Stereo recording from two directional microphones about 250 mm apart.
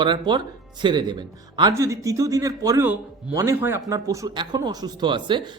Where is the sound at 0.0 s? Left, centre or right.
Centre.